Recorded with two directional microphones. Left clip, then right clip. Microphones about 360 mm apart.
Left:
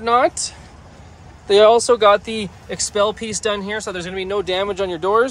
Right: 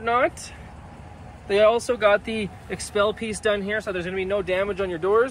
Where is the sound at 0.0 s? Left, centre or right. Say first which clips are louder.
Left 6 dB; centre.